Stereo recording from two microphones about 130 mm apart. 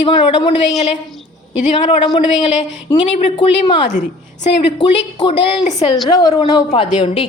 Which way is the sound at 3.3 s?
45° left (ahead or behind).